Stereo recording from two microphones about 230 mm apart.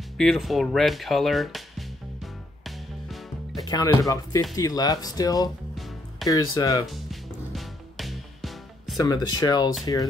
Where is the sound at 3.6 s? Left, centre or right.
Centre.